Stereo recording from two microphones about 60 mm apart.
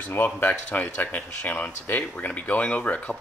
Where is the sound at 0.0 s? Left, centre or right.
Left.